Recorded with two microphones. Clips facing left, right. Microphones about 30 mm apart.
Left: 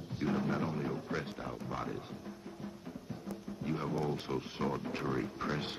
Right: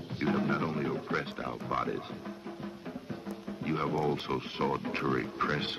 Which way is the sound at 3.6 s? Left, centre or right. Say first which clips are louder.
Right 5 dB; right.